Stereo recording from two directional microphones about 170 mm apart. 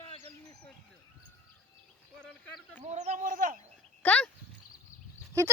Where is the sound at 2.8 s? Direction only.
40° right (ahead or behind).